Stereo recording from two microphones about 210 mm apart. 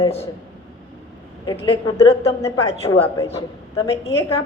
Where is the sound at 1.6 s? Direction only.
25° left (ahead or behind).